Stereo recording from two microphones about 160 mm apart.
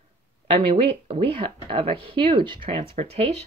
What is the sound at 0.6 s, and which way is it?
Speech, 35° right (ahead or behind).